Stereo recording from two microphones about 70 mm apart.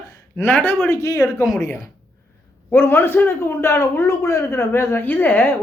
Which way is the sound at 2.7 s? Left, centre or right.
Left.